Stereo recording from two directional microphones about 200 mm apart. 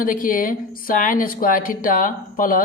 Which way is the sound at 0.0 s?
45° left (ahead or behind).